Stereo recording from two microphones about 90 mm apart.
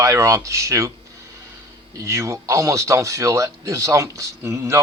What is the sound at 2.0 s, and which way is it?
Speech, 35° right (ahead or behind).